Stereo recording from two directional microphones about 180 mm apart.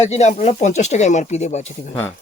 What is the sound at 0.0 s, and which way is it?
Speech, 40° left (ahead or behind).